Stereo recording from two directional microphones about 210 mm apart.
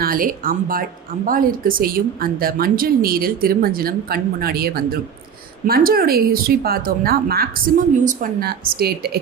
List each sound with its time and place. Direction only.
0.0 s speech: 40° right (ahead or behind)